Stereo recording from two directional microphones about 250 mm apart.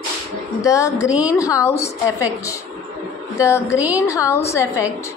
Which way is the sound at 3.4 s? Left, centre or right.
Centre.